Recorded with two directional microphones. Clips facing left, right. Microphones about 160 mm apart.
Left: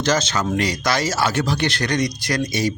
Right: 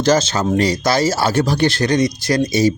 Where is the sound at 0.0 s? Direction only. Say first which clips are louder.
Right 5 dB; 30° right (ahead or behind).